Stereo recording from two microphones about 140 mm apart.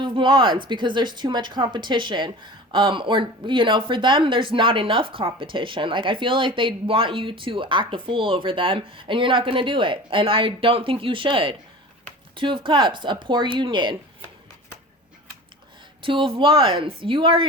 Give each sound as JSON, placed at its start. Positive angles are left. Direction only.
{"t": 0.0, "sound": "speech", "side_deg": -35}
{"t": 16.0, "sound": "speech", "side_deg": -40}